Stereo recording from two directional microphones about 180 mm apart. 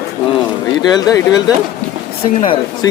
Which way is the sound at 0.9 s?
20° left (ahead or behind).